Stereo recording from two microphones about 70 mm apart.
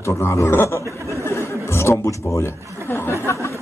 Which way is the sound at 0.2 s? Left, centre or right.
Left.